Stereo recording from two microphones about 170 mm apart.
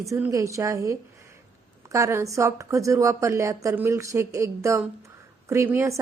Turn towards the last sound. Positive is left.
turn(degrees=-15)  # may be behind; listen again after turning